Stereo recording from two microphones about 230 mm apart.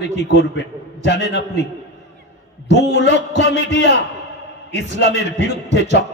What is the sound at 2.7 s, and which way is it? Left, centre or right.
A man's voice, left.